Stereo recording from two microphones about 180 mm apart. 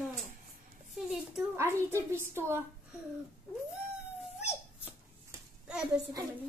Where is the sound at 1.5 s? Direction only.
15° right (ahead or behind).